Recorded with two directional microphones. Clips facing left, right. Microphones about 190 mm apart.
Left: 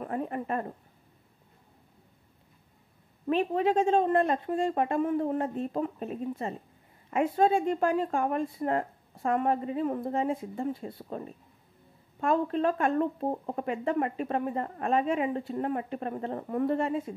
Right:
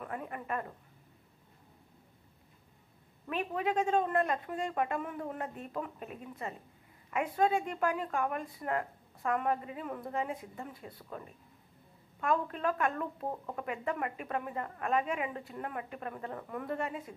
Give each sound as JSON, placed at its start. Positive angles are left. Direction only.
{"t": 0.0, "sound": "speech", "side_deg": 30}
{"t": 3.3, "sound": "speech", "side_deg": 30}